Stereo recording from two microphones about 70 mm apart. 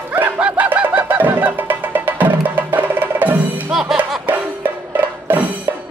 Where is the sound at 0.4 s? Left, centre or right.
Centre.